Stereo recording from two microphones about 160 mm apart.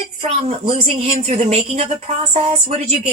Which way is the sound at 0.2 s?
40° right (ahead or behind).